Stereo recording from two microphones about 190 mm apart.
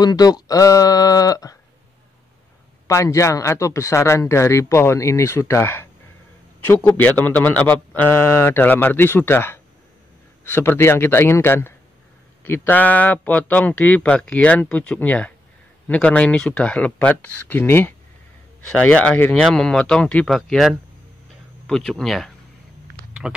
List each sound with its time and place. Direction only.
0.0 s speech: 20° left (ahead or behind)
2.9 s speech: 15° left (ahead or behind)